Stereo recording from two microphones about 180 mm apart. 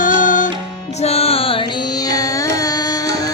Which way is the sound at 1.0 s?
35° left (ahead or behind).